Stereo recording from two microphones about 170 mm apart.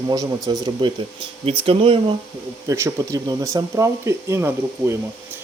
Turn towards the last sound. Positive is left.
turn(degrees=-15)  # may be behind; listen again after turning